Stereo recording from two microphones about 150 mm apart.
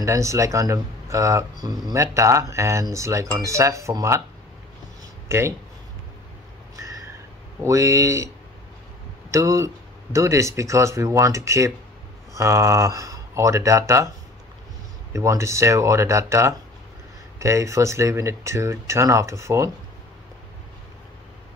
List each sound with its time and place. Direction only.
0.0 s speech: 20° right (ahead or behind)
5.3 s speech: 20° right (ahead or behind)
7.6 s speech: 20° right (ahead or behind)
9.3 s speech: 20° right (ahead or behind)
15.1 s speech: 20° right (ahead or behind)